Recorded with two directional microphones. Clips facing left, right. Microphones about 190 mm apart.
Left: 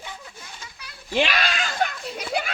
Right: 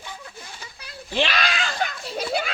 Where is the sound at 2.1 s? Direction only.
30° right (ahead or behind).